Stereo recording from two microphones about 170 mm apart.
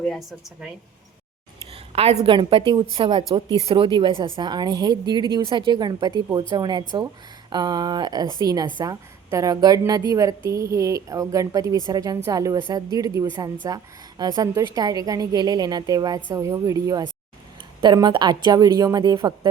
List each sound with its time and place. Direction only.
0.0 s speech: centre (ahead or behind)
1.7 s a sound: 35° right (ahead or behind)
2.2 s a woman's voice: 30° right (ahead or behind)